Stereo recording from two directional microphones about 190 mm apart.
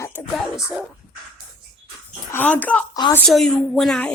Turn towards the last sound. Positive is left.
turn(degrees=0)  # may be behind; listen again after turning